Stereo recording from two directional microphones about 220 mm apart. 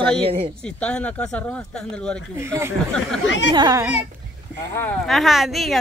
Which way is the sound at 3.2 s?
55° left (ahead or behind).